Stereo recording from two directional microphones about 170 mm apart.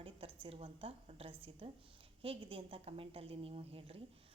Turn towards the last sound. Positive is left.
turn(degrees=-35)  # may be behind; listen again after turning